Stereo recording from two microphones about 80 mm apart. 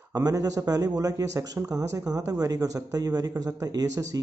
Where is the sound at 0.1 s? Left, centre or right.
Right.